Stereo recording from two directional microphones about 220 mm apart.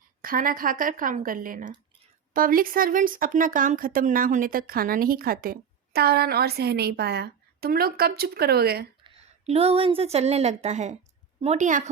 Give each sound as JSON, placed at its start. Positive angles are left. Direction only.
{"t": 0.2, "sound": "speech", "side_deg": -40}
{"t": 9.0, "sound": "speech", "side_deg": -25}